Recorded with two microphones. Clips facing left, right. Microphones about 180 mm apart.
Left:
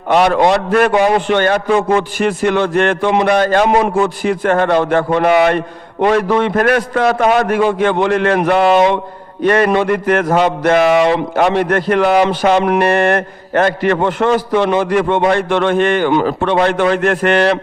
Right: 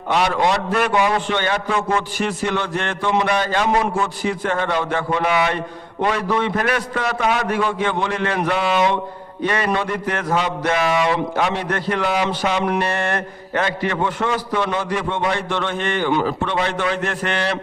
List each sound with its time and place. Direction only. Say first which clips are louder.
0.1 s a man's voice: left 7 dB; 55° left (ahead or behind)
6.1 s a man's voice: left 7 dB; 50° left (ahead or behind)
7.9 s a man's voice: left 8 dB; 65° left (ahead or behind)
10.2 s a man's voice: left 5 dB; 50° left (ahead or behind)
10.6 s a man's voice: left 9 dB; 70° left (ahead or behind); by 14.8 s 90° left
14.8 s a man's voice: left 9 dB; 55° left (ahead or behind)